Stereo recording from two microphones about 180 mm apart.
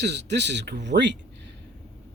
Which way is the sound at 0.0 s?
70° right (ahead or behind).